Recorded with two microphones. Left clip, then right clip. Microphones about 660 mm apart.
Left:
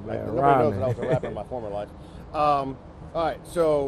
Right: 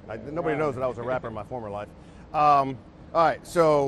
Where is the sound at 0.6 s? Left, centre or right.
Right.